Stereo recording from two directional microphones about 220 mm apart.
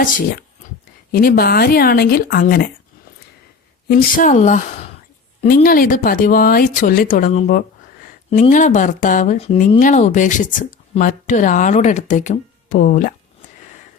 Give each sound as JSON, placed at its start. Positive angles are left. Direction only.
{"t": 1.1, "sound": "speech", "side_deg": 40}
{"t": 3.8, "sound": "speech", "side_deg": 40}
{"t": 5.6, "sound": "speech", "side_deg": 40}